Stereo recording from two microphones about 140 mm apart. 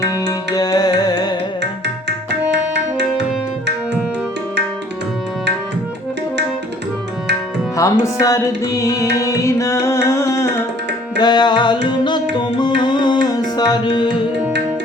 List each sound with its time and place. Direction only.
0.0 s music: 25° left (ahead or behind)
7.8 s music: 20° left (ahead or behind)
11.2 s music: 30° left (ahead or behind)